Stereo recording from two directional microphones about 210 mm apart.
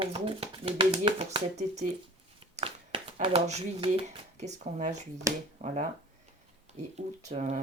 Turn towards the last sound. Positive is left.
turn(degrees=-35)  # may be behind; listen again after turning